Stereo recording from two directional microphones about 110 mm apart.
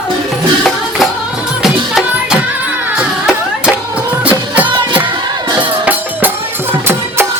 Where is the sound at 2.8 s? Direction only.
10° right (ahead or behind).